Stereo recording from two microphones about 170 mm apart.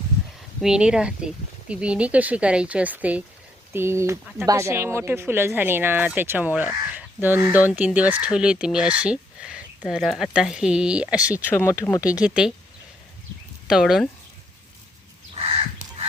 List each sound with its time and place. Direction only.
0.6 s speech: 5° right (ahead or behind)
11.4 s speech: 15° left (ahead or behind)
12.2 s speech: 5° right (ahead or behind)
13.7 s speech: centre (ahead or behind)